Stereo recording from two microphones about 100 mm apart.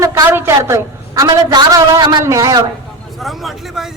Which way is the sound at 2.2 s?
30° right (ahead or behind).